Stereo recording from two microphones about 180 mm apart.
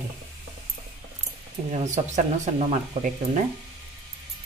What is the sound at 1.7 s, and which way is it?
Speech, 40° right (ahead or behind).